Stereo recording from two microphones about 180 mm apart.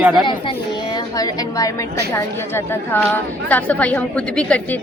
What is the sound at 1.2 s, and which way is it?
A woman's voice, 20° left (ahead or behind).